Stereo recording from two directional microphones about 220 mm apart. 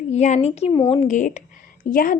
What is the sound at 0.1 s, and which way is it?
Speech, 30° left (ahead or behind).